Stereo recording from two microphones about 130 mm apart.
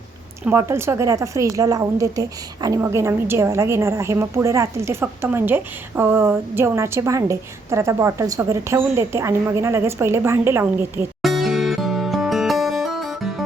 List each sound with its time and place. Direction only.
0.5 s a woman's voice: 20° right (ahead or behind)
11.2 s music: centre (ahead or behind)